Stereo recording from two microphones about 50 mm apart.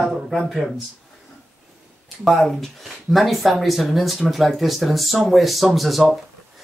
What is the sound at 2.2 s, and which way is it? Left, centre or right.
Speech, centre.